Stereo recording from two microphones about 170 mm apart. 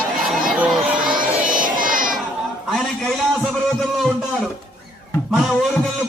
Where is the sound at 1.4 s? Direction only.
55° right (ahead or behind).